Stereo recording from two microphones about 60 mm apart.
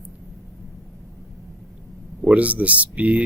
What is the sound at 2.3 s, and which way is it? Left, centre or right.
Speech, right.